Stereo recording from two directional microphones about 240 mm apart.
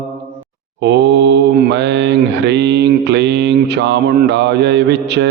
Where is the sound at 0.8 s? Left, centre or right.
Right.